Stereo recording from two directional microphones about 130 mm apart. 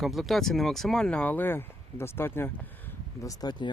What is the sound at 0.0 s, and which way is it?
Speech, centre (ahead or behind).